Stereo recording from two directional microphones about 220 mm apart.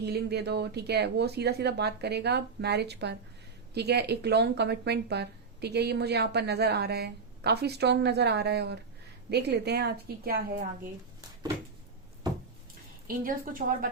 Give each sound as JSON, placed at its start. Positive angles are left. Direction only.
{"t": 0.0, "sound": "speech", "side_deg": -45}
{"t": 13.1, "sound": "a woman's voice", "side_deg": -40}